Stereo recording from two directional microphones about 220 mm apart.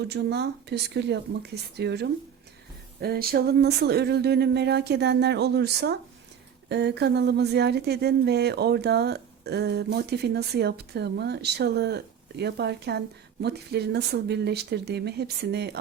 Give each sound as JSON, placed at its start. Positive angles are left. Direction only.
{"t": 0.0, "sound": "speech", "side_deg": -50}